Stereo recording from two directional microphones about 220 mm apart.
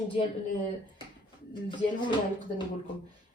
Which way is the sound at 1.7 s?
20° left (ahead or behind).